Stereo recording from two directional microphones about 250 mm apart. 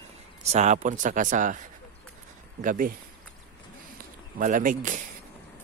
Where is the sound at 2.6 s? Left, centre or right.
Right.